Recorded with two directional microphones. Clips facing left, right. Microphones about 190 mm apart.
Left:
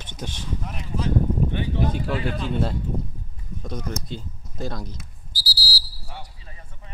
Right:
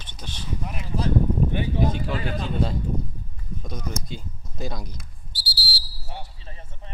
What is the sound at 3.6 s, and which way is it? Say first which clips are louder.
Speech: left 3 dB; 10° right (ahead or behind).